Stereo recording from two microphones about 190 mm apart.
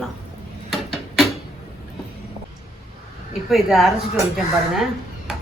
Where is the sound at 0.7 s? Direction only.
Centre (ahead or behind).